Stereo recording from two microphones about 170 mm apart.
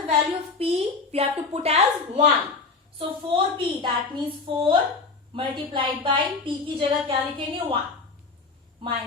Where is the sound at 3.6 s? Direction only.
30° right (ahead or behind).